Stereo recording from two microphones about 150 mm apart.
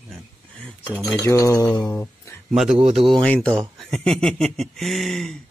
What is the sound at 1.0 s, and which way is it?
Mantra, 20° left (ahead or behind).